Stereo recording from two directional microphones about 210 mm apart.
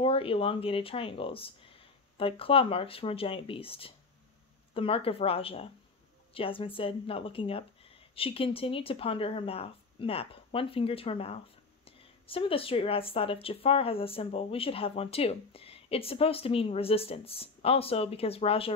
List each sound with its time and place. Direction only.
0.0 s speech: 25° left (ahead or behind)